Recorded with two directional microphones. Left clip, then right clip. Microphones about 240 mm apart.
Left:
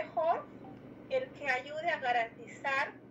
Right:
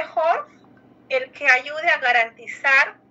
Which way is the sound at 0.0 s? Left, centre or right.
Right.